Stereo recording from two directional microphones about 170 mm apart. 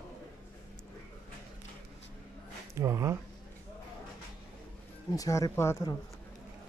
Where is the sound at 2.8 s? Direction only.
15° right (ahead or behind).